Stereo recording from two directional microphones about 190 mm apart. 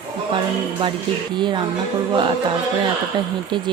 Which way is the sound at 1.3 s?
25° right (ahead or behind).